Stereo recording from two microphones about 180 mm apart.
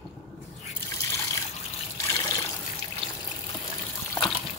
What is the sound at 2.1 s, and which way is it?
Trickle, 20° left (ahead or behind).